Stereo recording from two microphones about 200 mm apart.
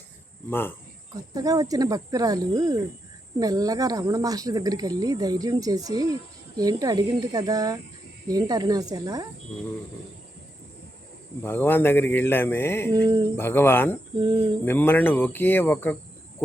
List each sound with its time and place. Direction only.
1.1 s speech: 20° right (ahead or behind)
11.4 s speech: 10° left (ahead or behind)
14.2 s speech: 20° right (ahead or behind)
14.6 s speech: 10° left (ahead or behind)